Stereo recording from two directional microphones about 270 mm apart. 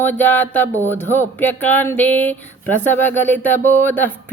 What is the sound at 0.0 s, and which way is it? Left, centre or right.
Speech, centre.